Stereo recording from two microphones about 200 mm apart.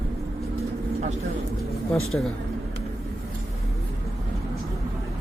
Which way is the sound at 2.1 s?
10° left (ahead or behind).